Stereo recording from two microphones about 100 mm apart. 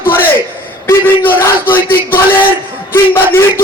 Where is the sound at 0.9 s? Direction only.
20° left (ahead or behind).